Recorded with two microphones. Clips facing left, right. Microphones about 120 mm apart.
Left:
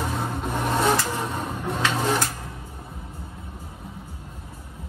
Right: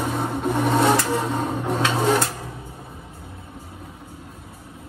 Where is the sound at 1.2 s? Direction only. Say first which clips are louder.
Right 5 dB; 25° right (ahead or behind).